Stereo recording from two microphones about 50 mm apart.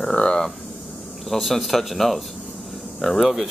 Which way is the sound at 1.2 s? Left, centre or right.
Centre.